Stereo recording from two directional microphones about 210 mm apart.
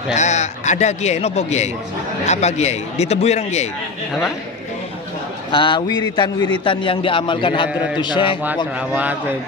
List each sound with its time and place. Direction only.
0.1 s a man's voice: 35° left (ahead or behind)
5.5 s a man's voice: 25° left (ahead or behind)
8.7 s speech: 5° right (ahead or behind)